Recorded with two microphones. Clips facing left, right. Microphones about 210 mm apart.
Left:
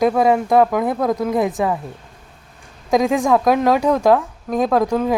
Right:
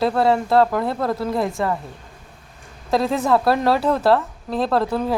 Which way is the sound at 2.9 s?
15° left (ahead or behind).